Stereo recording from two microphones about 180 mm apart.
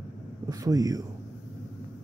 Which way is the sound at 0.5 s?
20° right (ahead or behind).